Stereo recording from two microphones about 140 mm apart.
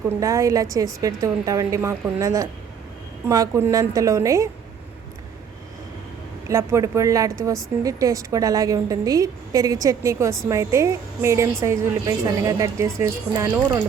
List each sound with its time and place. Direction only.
0.2 s a woman's voice: 20° right (ahead or behind)
6.5 s a woman's voice: 20° right (ahead or behind)